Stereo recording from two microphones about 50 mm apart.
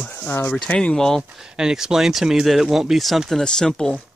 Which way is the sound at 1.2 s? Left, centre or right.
Centre.